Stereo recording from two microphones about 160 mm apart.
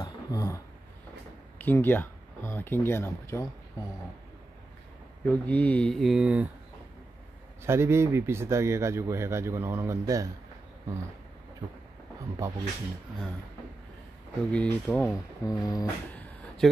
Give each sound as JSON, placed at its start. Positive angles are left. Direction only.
{"t": 0.0, "sound": "a sound", "side_deg": 20}
{"t": 1.6, "sound": "speech", "side_deg": 10}
{"t": 5.2, "sound": "speech", "side_deg": 10}
{"t": 7.6, "sound": "speech", "side_deg": -15}
{"t": 12.4, "sound": "speech", "side_deg": -15}
{"t": 14.5, "sound": "speech", "side_deg": 5}
{"t": 15.4, "sound": "speech", "side_deg": 25}